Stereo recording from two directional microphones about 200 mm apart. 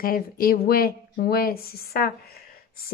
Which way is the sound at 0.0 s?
45° left (ahead or behind).